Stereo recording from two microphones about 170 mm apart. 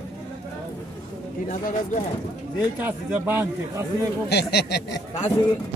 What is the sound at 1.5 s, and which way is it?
Speech, 50° left (ahead or behind).